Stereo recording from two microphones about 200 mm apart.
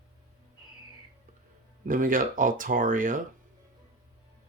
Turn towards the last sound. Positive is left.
turn(degrees=-40)  # may be behind; listen again after turning